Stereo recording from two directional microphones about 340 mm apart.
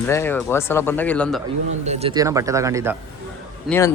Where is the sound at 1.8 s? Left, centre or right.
Centre.